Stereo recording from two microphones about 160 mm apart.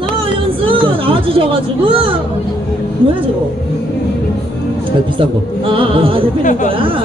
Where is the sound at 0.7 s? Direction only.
35° right (ahead or behind).